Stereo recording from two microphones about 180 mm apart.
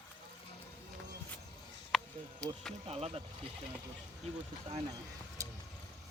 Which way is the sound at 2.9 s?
35° right (ahead or behind).